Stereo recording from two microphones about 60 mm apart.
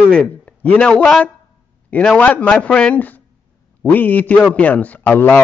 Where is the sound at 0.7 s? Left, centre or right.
Centre.